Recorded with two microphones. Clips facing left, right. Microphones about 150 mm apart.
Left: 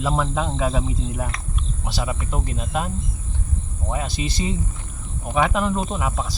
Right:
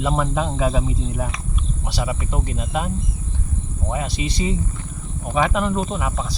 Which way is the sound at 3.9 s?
Centre (ahead or behind).